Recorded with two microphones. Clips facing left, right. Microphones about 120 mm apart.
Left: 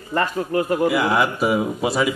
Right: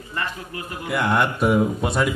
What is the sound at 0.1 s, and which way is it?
Speech, 45° left (ahead or behind).